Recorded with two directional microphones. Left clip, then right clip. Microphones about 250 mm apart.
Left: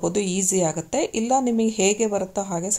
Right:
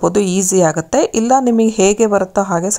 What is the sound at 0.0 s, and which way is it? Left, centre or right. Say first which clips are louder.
Speech: right 9 dB; centre.